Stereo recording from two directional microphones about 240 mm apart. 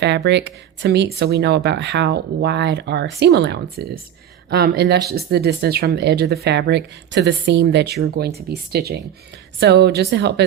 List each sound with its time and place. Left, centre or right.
0.3 s speech: right